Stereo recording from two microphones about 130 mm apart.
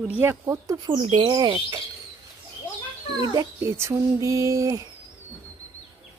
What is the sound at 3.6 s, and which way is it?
Speech, 20° right (ahead or behind).